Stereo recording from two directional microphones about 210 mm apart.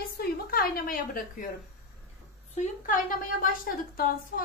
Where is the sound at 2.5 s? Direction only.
35° left (ahead or behind).